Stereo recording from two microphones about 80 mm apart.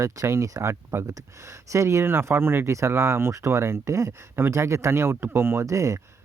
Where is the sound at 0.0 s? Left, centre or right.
Right.